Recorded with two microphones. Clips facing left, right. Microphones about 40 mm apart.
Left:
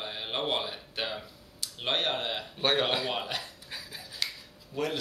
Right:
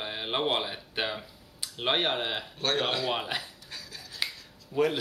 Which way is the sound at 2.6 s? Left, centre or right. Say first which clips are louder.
Left 2 dB; centre.